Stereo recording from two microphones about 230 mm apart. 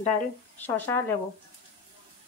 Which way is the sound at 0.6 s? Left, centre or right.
Centre.